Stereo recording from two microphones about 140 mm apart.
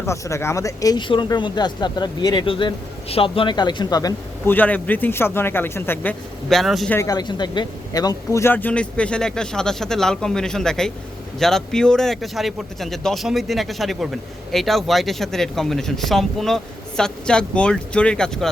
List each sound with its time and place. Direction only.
0.0 s speech: 20° left (ahead or behind)
4.4 s speech: 10° left (ahead or behind)
6.5 s a man's voice: centre (ahead or behind)
6.9 s a man's voice: 25° left (ahead or behind); by 18.4 s 5° left (ahead or behind)